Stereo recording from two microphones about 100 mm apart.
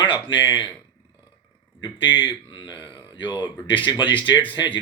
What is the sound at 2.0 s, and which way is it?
Speech, 55° left (ahead or behind).